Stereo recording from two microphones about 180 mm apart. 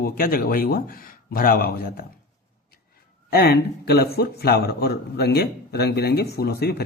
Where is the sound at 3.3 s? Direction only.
60° left (ahead or behind).